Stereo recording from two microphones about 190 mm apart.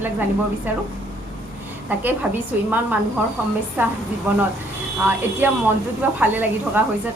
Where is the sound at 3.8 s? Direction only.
10° right (ahead or behind).